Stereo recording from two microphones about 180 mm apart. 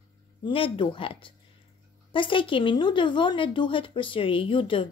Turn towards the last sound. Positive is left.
turn(degrees=30)  # may be behind; listen again after turning